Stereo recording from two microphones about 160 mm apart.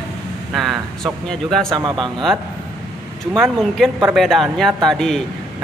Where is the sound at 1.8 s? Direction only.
25° right (ahead or behind).